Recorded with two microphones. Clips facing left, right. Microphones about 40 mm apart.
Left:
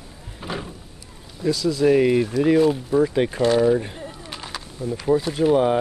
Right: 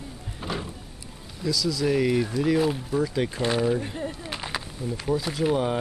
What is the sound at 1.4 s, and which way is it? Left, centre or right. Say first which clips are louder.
Speech: left 5 dB; left.